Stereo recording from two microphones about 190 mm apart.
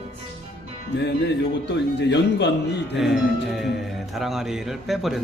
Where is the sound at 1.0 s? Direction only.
65° left (ahead or behind).